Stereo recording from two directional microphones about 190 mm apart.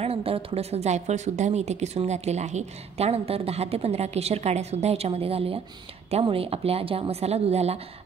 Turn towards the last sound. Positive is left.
turn(degrees=-35)  # may be behind; listen again after turning